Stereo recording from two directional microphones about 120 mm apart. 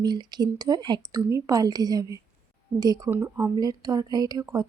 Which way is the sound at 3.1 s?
20° right (ahead or behind).